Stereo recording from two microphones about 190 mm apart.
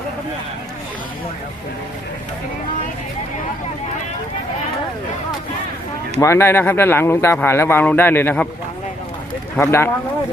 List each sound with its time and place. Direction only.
6.1 s speech: 15° left (ahead or behind)
9.6 s speech: 10° left (ahead or behind)